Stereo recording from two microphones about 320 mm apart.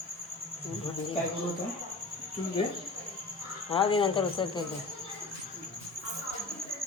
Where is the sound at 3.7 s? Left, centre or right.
Centre.